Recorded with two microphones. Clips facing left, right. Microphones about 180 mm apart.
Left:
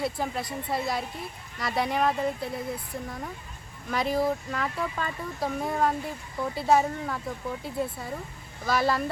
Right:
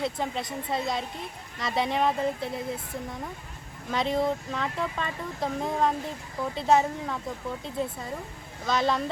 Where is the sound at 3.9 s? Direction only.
Centre (ahead or behind).